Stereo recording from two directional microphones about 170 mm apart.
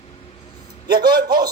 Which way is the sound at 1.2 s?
25° right (ahead or behind).